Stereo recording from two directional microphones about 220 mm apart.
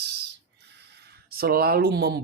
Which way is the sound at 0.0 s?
50° right (ahead or behind).